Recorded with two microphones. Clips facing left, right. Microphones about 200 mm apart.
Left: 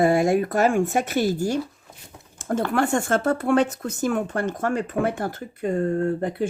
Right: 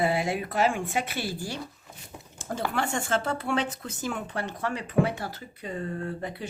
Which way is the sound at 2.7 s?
50° left (ahead or behind).